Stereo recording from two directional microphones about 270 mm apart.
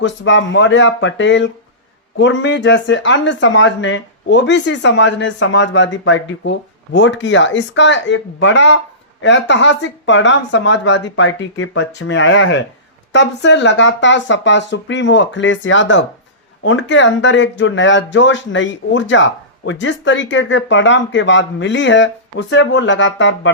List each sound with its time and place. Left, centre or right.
0.0 s speech: left